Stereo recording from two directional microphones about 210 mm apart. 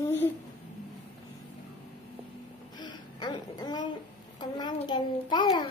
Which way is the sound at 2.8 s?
20° left (ahead or behind).